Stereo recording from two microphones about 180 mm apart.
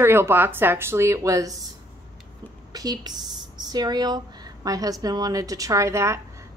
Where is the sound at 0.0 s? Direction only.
15° right (ahead or behind).